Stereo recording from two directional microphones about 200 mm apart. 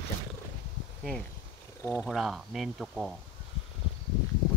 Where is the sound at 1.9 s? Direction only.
Centre (ahead or behind).